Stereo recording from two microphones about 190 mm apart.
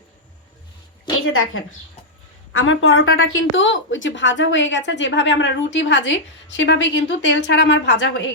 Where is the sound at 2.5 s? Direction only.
90° left.